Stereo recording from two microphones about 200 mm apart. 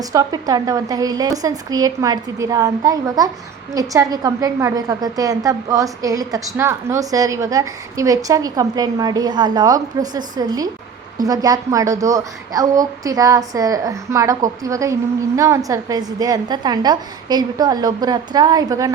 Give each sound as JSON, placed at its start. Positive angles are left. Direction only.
{"t": 0.0, "sound": "a woman's voice", "side_deg": -15}